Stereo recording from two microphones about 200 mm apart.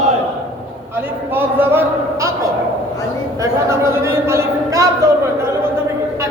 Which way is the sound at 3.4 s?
15° right (ahead or behind).